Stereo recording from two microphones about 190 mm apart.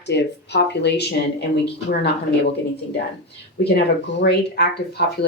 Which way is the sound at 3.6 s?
60° left (ahead or behind).